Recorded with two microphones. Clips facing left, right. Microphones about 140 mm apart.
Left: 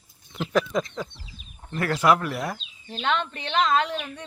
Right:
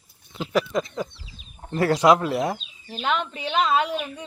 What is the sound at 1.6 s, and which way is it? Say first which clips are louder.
Speech: right 5 dB; 30° right (ahead or behind).